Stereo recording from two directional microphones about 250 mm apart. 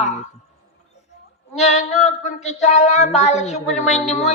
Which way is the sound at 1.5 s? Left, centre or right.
Left.